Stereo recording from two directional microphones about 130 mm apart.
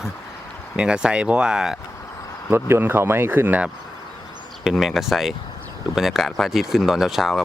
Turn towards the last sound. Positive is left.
turn(degrees=0)  # may be behind; listen again after turning